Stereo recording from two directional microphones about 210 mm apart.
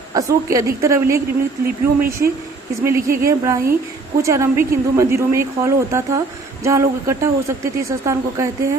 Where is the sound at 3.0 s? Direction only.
45° right (ahead or behind).